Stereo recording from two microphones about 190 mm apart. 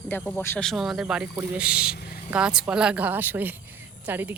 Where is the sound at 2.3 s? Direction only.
5° right (ahead or behind).